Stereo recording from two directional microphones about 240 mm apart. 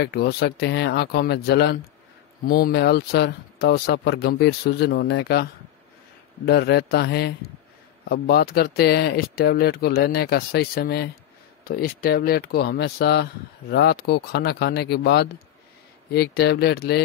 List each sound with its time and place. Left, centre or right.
0.0 s speech: left